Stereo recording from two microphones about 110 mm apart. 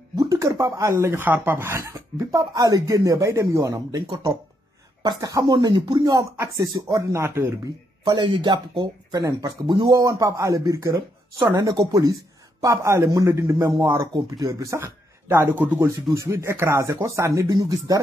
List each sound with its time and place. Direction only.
0.1 s speech: 30° right (ahead or behind)
8.0 s speech: 45° right (ahead or behind); by 15.9 s 15° right (ahead or behind)
16.2 s speech: 25° right (ahead or behind)